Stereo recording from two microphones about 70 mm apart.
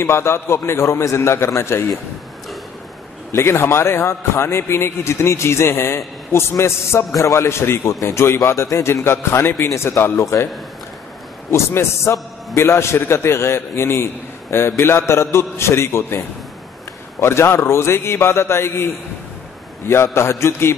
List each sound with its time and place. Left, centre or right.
0.0 s a man's voice: left
3.3 s a man's voice: left
11.5 s a man's voice: left
17.2 s a man's voice: left
19.9 s a man's voice: left